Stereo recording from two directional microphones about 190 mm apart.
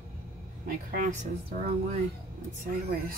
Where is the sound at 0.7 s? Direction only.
45° right (ahead or behind).